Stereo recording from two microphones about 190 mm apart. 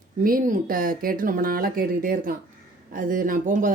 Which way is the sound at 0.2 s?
45° right (ahead or behind).